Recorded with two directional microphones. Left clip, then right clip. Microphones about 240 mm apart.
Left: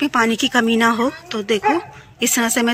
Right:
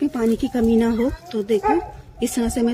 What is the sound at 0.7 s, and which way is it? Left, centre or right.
Speech, centre.